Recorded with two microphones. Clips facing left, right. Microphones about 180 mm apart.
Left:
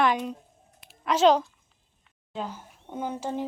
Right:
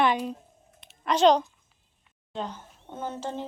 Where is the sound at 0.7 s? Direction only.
5° left (ahead or behind).